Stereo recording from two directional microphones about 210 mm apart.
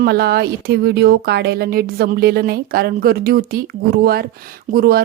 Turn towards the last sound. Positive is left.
turn(degrees=-45)  # may be behind; listen again after turning